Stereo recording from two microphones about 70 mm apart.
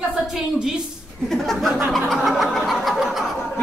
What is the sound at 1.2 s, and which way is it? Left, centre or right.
Speech, centre.